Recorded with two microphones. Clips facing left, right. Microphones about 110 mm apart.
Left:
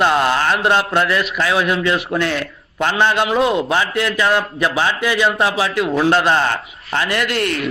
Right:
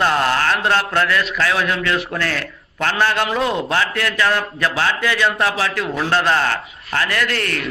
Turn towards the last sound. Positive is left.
turn(degrees=20)  # may be behind; listen again after turning